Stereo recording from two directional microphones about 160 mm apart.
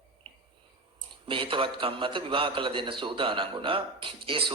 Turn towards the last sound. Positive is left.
turn(degrees=-30)  # may be behind; listen again after turning